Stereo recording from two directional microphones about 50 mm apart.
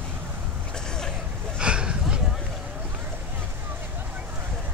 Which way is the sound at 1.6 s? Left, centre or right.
Centre.